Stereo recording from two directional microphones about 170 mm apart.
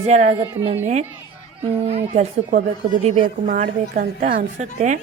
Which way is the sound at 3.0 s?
40° right (ahead or behind).